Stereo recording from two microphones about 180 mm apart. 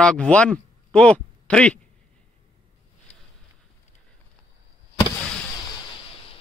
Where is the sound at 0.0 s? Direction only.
5° left (ahead or behind).